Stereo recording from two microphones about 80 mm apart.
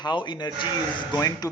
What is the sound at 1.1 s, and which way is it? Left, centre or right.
Speech, left.